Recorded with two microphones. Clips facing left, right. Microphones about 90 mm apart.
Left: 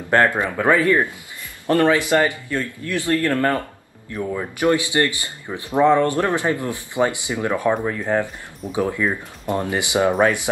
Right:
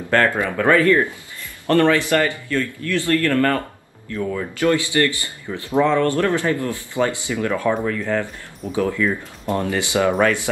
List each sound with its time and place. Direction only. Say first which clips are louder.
0.1 s speech: left 1 dB; 20° left (ahead or behind)